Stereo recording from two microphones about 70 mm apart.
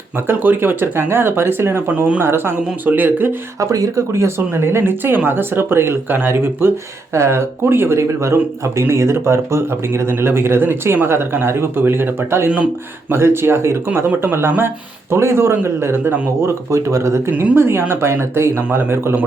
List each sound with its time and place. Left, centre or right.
0.3 s speech: right
3.6 s speech: right
4.4 s speech: right
17.3 s speech: right